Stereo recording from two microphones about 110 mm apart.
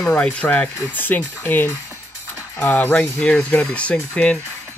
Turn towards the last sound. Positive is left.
turn(degrees=10)  # may be behind; listen again after turning